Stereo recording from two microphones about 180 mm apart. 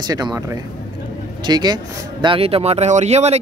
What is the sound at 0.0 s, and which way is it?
Speech, 20° right (ahead or behind).